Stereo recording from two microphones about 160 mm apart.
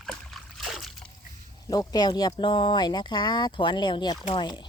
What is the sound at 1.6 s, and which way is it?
Speech, 25° left (ahead or behind).